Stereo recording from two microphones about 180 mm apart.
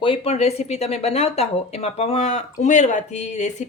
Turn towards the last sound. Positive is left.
turn(degrees=40)  # may be behind; listen again after turning